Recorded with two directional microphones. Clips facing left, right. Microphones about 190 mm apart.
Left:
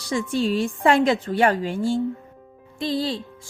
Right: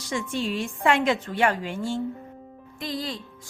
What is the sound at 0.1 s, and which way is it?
A woman's voice, 35° left (ahead or behind).